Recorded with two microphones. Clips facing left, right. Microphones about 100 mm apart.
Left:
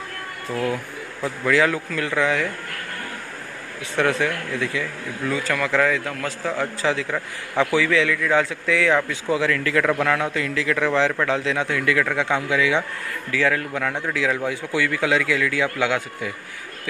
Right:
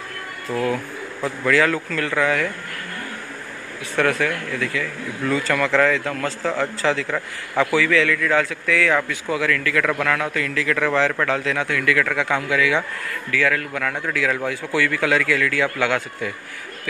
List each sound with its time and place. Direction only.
0.5 s a man's voice: 10° left (ahead or behind)
3.9 s speech: 20° left (ahead or behind)
5.2 s a man's voice: 5° left (ahead or behind)